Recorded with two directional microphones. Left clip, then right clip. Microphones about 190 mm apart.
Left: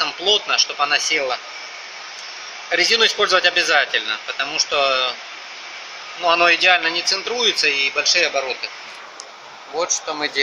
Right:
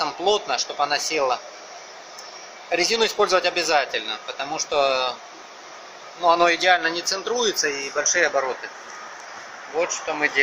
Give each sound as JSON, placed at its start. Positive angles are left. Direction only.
{"t": 0.0, "sound": "a man's voice", "side_deg": -5}
{"t": 2.7, "sound": "a man's voice", "side_deg": -5}
{"t": 6.2, "sound": "a man's voice", "side_deg": 0}
{"t": 7.5, "sound": "speech", "side_deg": 15}
{"t": 8.2, "sound": "a man's voice", "side_deg": 0}
{"t": 9.8, "sound": "speech", "side_deg": 20}